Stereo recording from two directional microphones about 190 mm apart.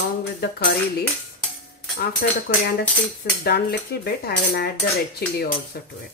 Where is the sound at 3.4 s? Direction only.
55° left (ahead or behind).